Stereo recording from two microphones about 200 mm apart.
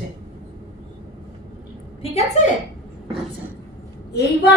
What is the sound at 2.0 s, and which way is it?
Speech, 30° left (ahead or behind).